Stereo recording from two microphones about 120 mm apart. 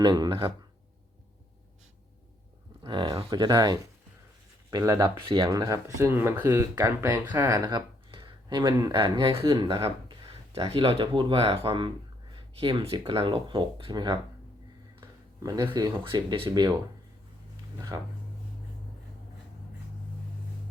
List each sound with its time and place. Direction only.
0.0 s speech: 35° right (ahead or behind)
2.8 s speech: 40° right (ahead or behind)
5.5 s speech: 25° right (ahead or behind); by 14.2 s 40° right (ahead or behind)
15.7 s speech: 35° right (ahead or behind)
17.7 s speech: 30° right (ahead or behind)